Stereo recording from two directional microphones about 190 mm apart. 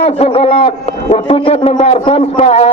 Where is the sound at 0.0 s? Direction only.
30° left (ahead or behind).